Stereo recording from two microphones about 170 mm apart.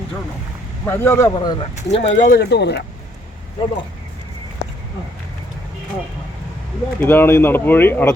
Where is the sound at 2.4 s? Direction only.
80° left.